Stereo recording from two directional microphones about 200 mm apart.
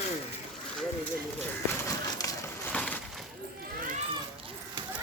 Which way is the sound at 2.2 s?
5° left (ahead or behind).